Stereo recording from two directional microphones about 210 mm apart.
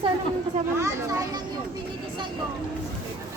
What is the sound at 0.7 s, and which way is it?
Speech, 15° right (ahead or behind).